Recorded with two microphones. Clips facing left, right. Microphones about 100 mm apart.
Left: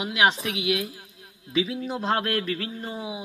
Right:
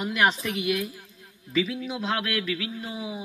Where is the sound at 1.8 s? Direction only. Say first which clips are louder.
Left 3 dB; 40° left (ahead or behind).